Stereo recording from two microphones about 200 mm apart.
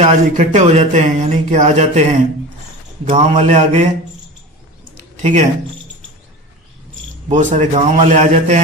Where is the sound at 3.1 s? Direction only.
35° right (ahead or behind).